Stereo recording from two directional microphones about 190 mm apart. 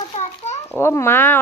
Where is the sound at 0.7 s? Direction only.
15° left (ahead or behind).